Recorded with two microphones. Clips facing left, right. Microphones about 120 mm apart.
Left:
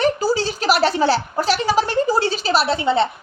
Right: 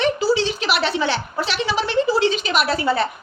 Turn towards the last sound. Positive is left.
turn(degrees=25)  # may be behind; listen again after turning